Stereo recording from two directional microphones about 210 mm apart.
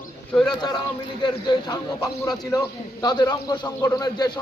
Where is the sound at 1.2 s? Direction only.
20° left (ahead or behind).